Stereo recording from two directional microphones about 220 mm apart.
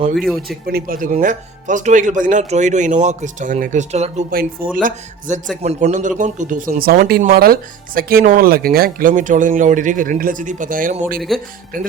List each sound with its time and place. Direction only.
0.2 s speech: centre (ahead or behind)
0.7 s speech: 40° right (ahead or behind)
11.3 s speech: centre (ahead or behind)